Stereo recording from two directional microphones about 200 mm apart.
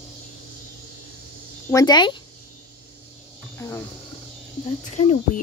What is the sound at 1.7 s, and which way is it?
Speech, 20° left (ahead or behind).